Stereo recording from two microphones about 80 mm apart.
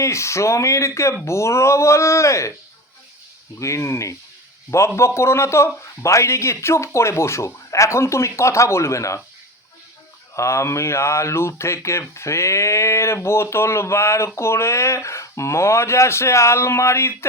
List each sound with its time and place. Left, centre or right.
0.0 s speech: left
3.6 s speech: left
10.3 s speech: left